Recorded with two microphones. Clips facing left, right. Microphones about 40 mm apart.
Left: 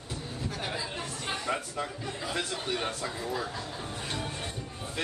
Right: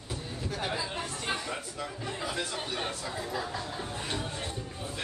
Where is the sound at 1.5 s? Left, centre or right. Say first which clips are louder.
Left 5 dB; left.